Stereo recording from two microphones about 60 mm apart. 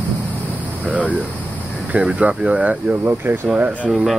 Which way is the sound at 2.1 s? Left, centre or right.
Centre.